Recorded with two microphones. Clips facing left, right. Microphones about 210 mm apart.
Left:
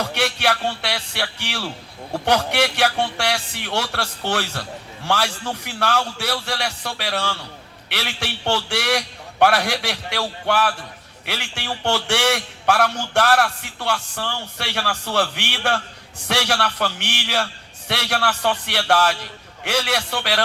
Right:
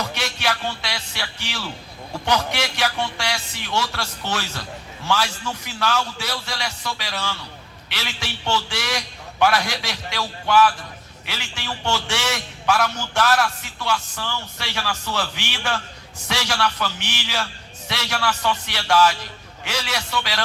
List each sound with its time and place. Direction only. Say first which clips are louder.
0.1 s a man's voice: left 4 dB; 65° left (ahead or behind)